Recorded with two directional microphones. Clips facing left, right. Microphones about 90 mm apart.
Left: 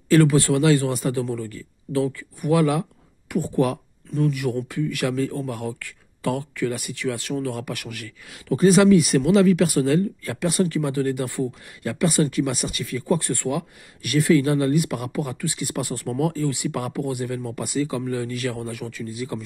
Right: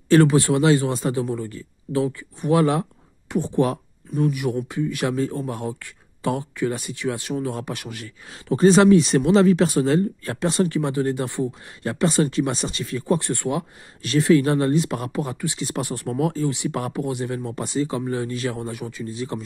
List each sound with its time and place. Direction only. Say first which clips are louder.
0.1 s a man's voice: right 1 dB; 25° right (ahead or behind)
8.3 s a man's voice: right 1 dB; 30° right (ahead or behind)